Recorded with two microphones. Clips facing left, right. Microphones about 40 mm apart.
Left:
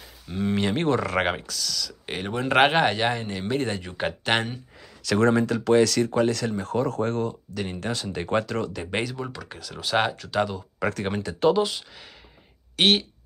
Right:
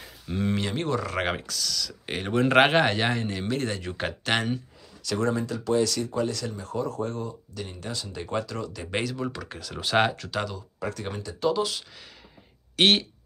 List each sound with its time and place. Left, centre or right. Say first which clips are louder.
0.6 s a sound: left 4 dB; centre
0.8 s speech: left 5 dB; left
1.3 s speech: even; centre
5.0 s speech: left 6 dB; left
8.9 s speech: right 1 dB; centre
11.0 s speech: left 6 dB; left
12.7 s speech: even; centre